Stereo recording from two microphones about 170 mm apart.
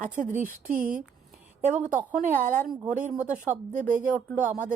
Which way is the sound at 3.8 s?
50° right (ahead or behind).